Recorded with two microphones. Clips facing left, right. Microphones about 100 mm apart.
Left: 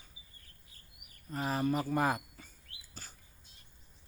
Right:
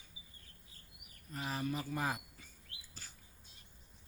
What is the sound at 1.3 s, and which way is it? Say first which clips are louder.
Speech: left 7 dB; 45° left (ahead or behind).